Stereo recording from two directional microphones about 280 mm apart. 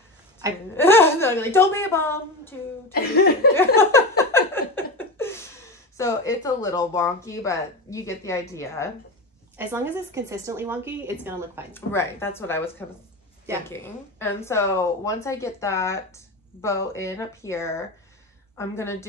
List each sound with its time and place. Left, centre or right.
0.4 s a woman's voice: centre
0.7 s a woman's voice: centre
2.9 s cough: left
3.5 s a woman's voice: centre
9.6 s a woman's voice: centre
11.7 s a woman's voice: centre